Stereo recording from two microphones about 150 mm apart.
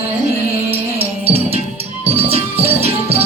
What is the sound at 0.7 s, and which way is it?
Music, 40° right (ahead or behind).